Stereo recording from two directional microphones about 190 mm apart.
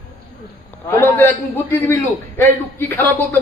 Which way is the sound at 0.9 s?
10° left (ahead or behind).